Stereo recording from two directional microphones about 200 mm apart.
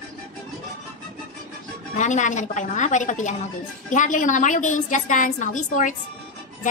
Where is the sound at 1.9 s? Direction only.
40° left (ahead or behind).